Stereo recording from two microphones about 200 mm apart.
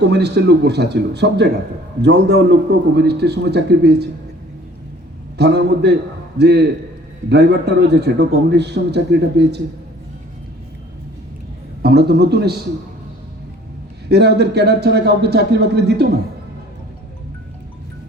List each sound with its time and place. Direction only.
0.1 s a man's voice: 55° right (ahead or behind)
5.4 s a man's voice: 55° right (ahead or behind)
11.8 s a man's voice: 55° right (ahead or behind)
14.1 s a man's voice: 55° right (ahead or behind)